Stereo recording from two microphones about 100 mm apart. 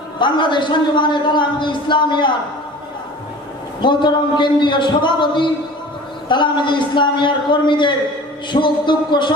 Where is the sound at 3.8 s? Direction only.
50° left (ahead or behind).